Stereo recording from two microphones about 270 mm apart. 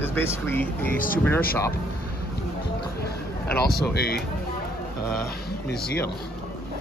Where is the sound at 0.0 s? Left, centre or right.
Centre.